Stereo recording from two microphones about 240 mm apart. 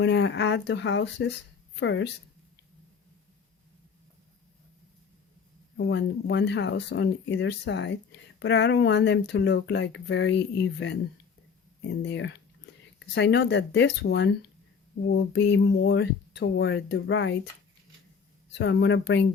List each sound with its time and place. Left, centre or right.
0.0 s speech: left
5.7 s speech: left
18.5 s speech: left